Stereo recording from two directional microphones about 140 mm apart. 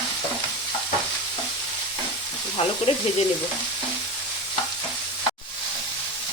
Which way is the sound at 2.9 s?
50° left (ahead or behind).